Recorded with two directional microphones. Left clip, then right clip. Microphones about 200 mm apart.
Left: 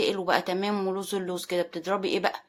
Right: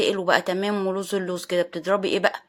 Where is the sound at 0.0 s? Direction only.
20° right (ahead or behind).